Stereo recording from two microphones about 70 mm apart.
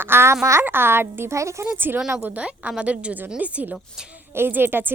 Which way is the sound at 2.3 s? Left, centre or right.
Centre.